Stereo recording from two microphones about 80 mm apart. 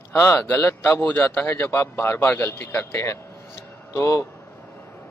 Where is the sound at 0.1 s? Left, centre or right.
Left.